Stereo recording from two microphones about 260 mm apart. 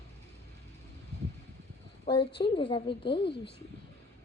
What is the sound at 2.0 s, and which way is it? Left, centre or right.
A woman's voice, centre.